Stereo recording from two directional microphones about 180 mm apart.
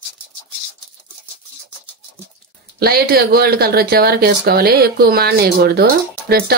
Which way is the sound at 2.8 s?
60° right (ahead or behind).